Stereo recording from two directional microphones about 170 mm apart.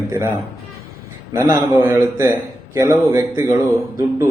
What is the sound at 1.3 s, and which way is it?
A man's voice, 15° right (ahead or behind).